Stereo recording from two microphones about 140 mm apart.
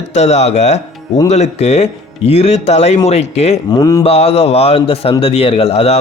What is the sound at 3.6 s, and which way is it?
Speech, 30° left (ahead or behind).